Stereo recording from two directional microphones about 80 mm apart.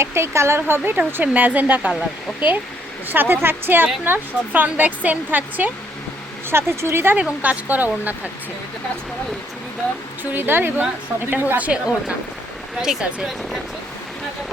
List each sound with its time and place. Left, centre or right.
0.0 s speech: right
3.1 s speech: right
6.5 s speech: right
7.2 s speech: centre
10.3 s speech: right
12.8 s speech: centre